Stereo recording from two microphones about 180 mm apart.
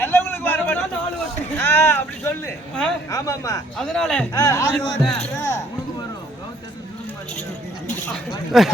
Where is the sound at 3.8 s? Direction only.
5° left (ahead or behind).